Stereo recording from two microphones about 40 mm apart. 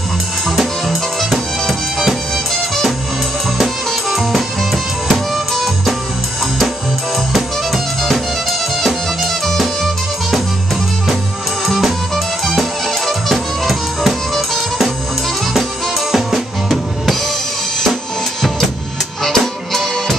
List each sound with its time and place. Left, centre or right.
0.5 s music: centre
3.5 s music: centre
8.0 s music: centre
11.6 s music: centre
13.0 s music: centre
16.1 s drum kit: centre
19.2 s music: centre